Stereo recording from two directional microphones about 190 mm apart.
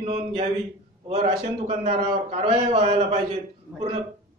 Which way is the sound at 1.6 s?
30° right (ahead or behind).